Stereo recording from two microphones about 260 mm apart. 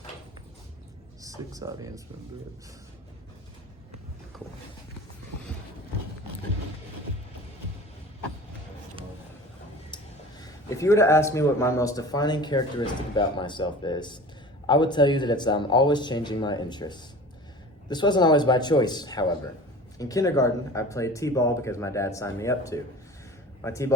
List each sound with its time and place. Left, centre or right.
1.2 s speech: centre
9.9 s a man's voice: centre